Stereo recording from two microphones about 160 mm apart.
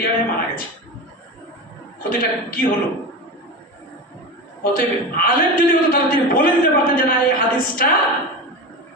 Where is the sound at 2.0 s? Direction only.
65° left (ahead or behind).